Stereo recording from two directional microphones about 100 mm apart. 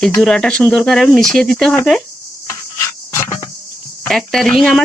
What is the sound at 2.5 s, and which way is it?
Rub, 30° left (ahead or behind).